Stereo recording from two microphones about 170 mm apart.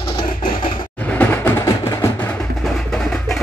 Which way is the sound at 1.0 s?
10° left (ahead or behind).